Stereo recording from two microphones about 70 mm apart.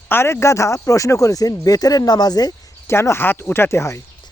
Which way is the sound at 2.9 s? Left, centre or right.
Left.